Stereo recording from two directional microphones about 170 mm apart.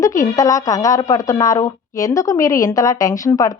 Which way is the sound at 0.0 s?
20° left (ahead or behind).